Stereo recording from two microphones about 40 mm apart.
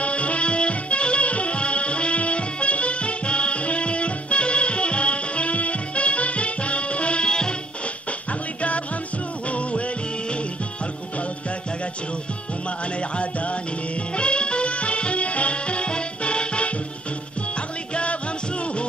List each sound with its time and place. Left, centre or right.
0.0 s music: left
8.3 s music: left
12.6 s music: left